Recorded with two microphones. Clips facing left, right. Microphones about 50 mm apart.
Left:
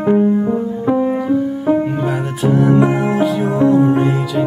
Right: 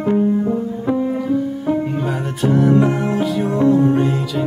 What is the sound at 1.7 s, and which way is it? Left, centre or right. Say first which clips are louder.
Music: left 4 dB; centre.